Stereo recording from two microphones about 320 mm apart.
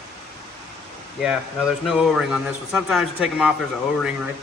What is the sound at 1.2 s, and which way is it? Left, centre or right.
A man's voice, centre.